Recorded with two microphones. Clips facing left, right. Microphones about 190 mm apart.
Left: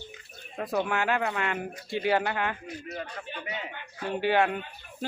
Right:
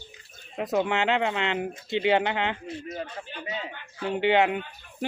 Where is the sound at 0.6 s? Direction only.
20° right (ahead or behind).